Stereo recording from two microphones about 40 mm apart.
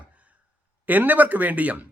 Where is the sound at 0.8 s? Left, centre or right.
Right.